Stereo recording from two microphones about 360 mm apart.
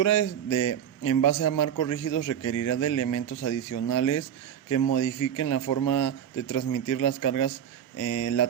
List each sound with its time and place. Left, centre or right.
0.5 s a man's voice: left
1.2 s a man's voice: left
2.3 s a man's voice: left